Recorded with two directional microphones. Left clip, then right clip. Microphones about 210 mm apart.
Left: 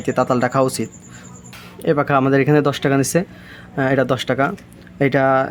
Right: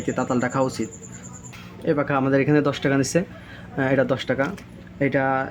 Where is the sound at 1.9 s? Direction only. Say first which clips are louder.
Left 5 dB; 30° left (ahead or behind).